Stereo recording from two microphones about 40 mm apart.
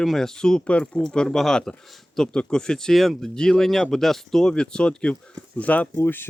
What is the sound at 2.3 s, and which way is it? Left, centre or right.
Speech, centre.